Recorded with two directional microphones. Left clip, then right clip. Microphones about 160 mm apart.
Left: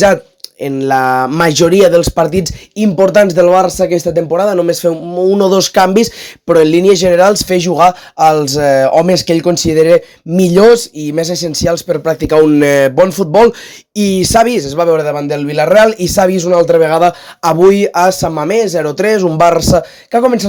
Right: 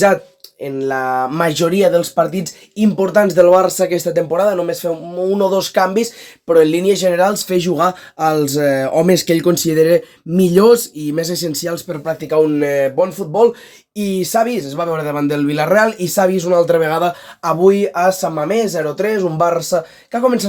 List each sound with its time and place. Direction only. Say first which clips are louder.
0.6 s a man's voice: left 7 dB; 45° left (ahead or behind); by 4.4 s 25° left (ahead or behind)
4.4 s a man's voice: left 5 dB; 40° left (ahead or behind)
15.0 s a man's voice: left 2 dB; 25° left (ahead or behind); by 20.3 s 45° left (ahead or behind)